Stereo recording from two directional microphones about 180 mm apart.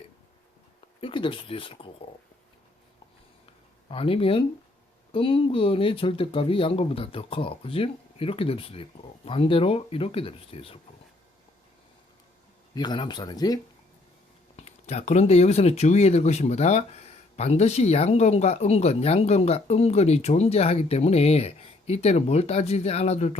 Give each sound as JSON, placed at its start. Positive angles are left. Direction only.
{"t": 1.0, "sound": "speech", "side_deg": 30}
{"t": 3.8, "sound": "speech", "side_deg": 30}
{"t": 12.7, "sound": "speech", "side_deg": 25}
{"t": 14.5, "sound": "speech", "side_deg": 35}